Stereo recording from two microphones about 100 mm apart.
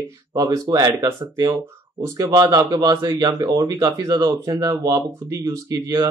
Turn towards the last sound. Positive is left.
turn(degrees=-35)  # may be behind; listen again after turning